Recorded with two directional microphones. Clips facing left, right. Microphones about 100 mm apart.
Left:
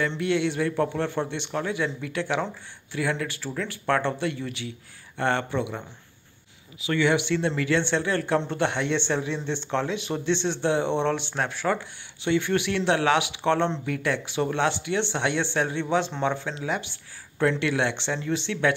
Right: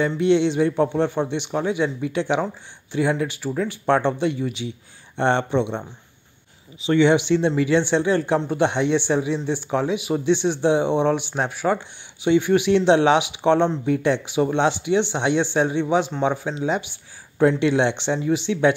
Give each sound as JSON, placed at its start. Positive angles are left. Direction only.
{"t": 0.2, "sound": "speech", "side_deg": -20}